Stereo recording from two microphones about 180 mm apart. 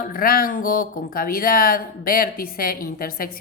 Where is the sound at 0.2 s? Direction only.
50° left (ahead or behind).